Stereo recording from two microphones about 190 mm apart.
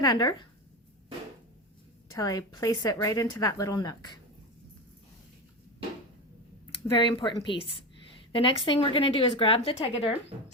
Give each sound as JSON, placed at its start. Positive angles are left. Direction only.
{"t": 0.0, "sound": "a woman's voice", "side_deg": 20}
{"t": 2.1, "sound": "a woman's voice", "side_deg": 20}
{"t": 6.9, "sound": "a woman's voice", "side_deg": 25}